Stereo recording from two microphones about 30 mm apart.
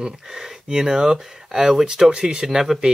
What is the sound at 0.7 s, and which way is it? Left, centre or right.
Speech, centre.